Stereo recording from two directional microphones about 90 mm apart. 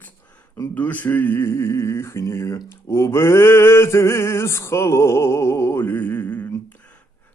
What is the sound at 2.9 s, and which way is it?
Male singing, 30° left (ahead or behind).